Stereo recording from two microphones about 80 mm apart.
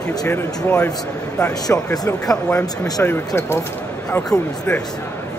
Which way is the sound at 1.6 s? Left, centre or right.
Left.